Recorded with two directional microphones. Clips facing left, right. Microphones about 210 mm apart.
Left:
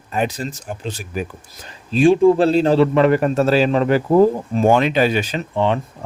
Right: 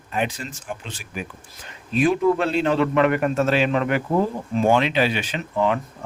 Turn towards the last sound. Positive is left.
turn(degrees=30)  # may be behind; listen again after turning